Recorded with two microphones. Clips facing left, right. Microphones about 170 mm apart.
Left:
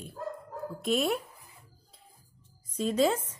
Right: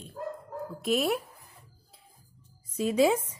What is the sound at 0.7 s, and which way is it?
Speech, centre (ahead or behind).